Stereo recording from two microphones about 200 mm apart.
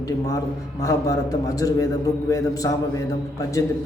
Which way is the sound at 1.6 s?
15° left (ahead or behind).